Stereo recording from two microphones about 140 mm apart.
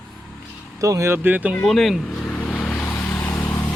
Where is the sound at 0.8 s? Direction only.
20° right (ahead or behind).